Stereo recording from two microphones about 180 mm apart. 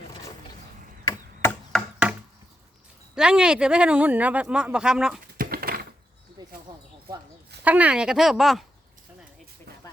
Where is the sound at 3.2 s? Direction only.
5° right (ahead or behind).